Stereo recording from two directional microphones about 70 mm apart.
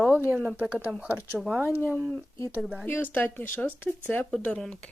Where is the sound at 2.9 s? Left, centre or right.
Left.